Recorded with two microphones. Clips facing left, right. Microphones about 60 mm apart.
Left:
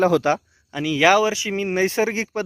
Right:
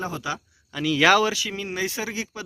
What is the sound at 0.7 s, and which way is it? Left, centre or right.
Speech, centre.